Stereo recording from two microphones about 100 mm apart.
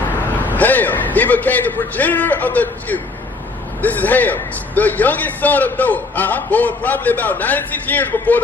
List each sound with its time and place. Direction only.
0.5 s speech: 15° left (ahead or behind)